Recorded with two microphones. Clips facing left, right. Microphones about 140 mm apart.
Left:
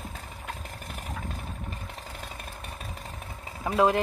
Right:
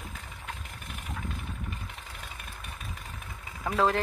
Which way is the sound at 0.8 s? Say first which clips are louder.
Left 1 dB; 40° left (ahead or behind).